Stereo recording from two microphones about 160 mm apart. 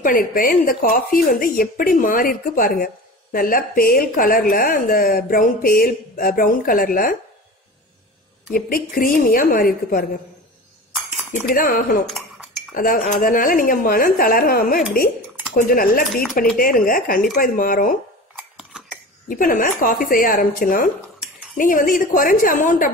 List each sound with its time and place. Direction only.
0.0 s speech: 60° left (ahead or behind)
8.5 s speech: 65° left (ahead or behind)
11.4 s speech: 60° left (ahead or behind)
13.0 s speech: 55° left (ahead or behind)
18.3 s a sound: 5° right (ahead or behind)
19.2 s speech: 60° left (ahead or behind)